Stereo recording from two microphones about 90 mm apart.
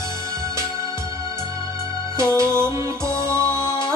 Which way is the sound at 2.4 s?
35° right (ahead or behind).